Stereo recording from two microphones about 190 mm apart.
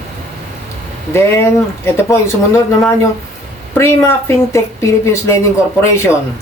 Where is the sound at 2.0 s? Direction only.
15° left (ahead or behind).